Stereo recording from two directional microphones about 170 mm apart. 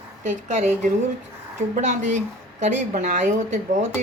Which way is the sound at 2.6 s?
45° right (ahead or behind).